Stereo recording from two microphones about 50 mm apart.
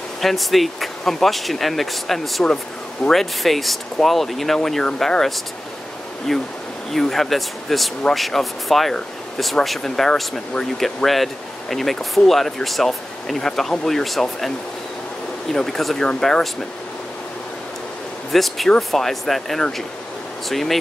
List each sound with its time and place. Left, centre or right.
0.2 s speech: centre
15.5 s speech: centre
18.3 s speech: centre